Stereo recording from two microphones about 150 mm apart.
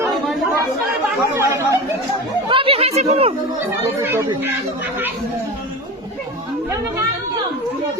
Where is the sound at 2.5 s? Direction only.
35° right (ahead or behind).